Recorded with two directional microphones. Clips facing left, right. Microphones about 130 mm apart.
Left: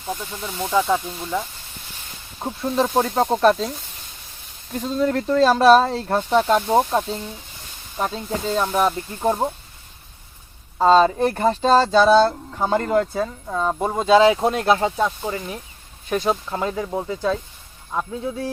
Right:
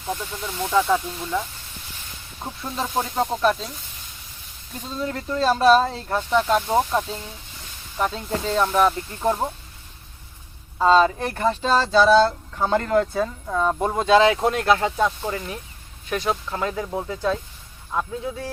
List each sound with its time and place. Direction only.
0.0 s speech: 5° left (ahead or behind)
2.4 s speech: 35° left (ahead or behind)
2.8 s speech: 45° left (ahead or behind)
3.2 s speech: 35° left (ahead or behind)
4.8 s speech: 70° left (ahead or behind)
6.1 s speech: 35° left (ahead or behind)
8.1 s speech: 10° left (ahead or behind)
10.8 s speech: 30° left (ahead or behind)
11.9 s speech: 20° left (ahead or behind)
14.5 s speech: 25° left (ahead or behind)
14.9 s speech: 10° left (ahead or behind)
16.0 s speech: 25° left (ahead or behind)